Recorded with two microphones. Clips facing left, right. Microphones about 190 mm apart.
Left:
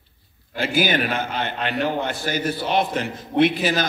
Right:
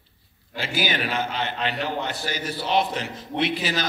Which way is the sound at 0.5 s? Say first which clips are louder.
Left 6 dB; 50° left (ahead or behind).